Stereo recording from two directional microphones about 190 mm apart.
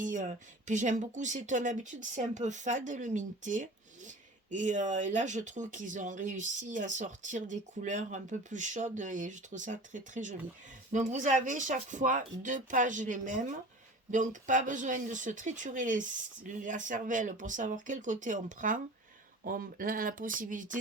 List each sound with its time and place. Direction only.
0.0 s speech: 40° right (ahead or behind)